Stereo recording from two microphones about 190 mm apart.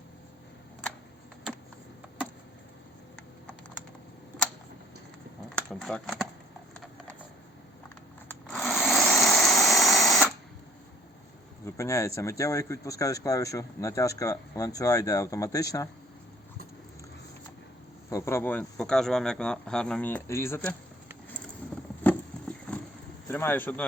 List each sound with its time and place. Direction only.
5.5 s a sound: 5° left (ahead or behind)
8.3 s power tool: 5° left (ahead or behind)
11.6 s speech: 15° left (ahead or behind)
18.1 s speech: 15° left (ahead or behind)
22.0 s a sound: 5° left (ahead or behind)
23.3 s speech: 10° left (ahead or behind)